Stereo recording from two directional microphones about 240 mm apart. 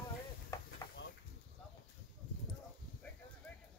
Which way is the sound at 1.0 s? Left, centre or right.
Left.